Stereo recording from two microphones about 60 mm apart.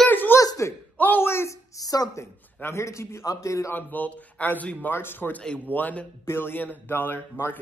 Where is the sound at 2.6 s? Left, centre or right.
Left.